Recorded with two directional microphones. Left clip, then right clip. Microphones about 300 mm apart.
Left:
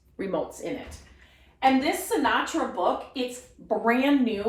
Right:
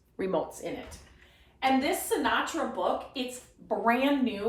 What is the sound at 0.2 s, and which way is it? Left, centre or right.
Speech, centre.